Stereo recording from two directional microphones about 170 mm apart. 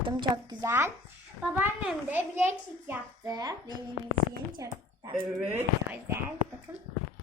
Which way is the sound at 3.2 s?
20° right (ahead or behind).